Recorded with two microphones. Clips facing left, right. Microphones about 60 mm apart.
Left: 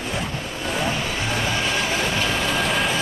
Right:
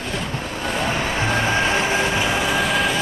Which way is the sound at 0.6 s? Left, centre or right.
Centre.